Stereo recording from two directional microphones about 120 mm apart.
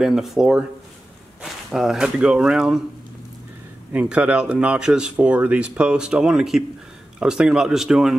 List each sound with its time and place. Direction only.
0.0 s speech: 5° right (ahead or behind)
3.9 s speech: 10° right (ahead or behind)